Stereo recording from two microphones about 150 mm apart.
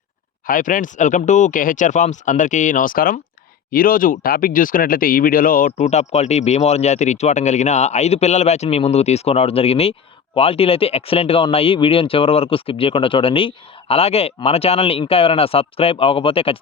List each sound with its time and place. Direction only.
0.4 s speech: 65° left (ahead or behind); by 16.6 s 40° left (ahead or behind)